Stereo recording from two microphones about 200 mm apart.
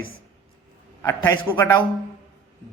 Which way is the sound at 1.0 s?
15° left (ahead or behind).